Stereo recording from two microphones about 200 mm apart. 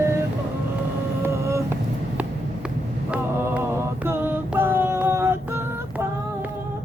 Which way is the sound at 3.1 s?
10° right (ahead or behind).